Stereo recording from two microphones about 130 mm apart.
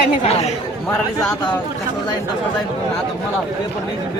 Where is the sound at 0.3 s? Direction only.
55° left (ahead or behind).